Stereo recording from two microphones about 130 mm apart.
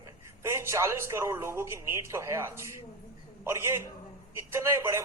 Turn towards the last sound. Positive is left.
turn(degrees=-20)  # may be behind; listen again after turning